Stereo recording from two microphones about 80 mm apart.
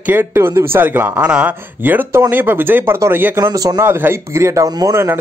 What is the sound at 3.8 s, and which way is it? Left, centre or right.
Speech, right.